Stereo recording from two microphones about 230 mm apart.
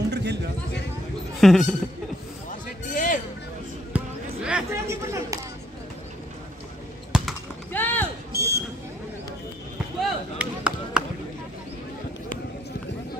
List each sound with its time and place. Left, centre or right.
0.1 s a sound: right
1.4 s speech: centre
2.9 s music: left
3.9 s basketball bounce: centre
7.1 s basketball bounce: centre
8.4 s a sound: centre
9.9 s chop: centre